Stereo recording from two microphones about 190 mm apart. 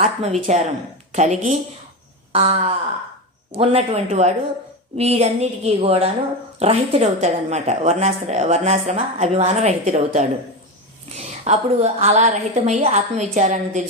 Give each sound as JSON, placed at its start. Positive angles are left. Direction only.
{"t": 0.0, "sound": "a woman's voice", "side_deg": -35}